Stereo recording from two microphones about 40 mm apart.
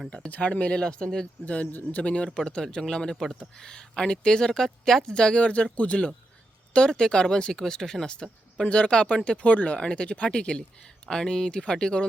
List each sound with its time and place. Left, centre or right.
0.3 s speech: left; by 1.3 s centre
2.0 s speech: left
4.4 s speech: centre
5.1 s speech: left
8.6 s speech: left